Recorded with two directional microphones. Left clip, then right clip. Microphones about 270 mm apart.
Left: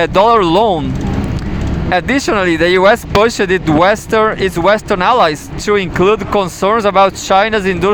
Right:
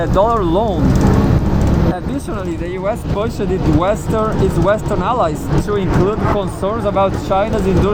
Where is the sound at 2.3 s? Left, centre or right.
Left.